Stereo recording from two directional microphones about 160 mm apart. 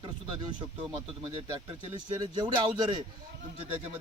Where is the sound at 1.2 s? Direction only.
30° right (ahead or behind).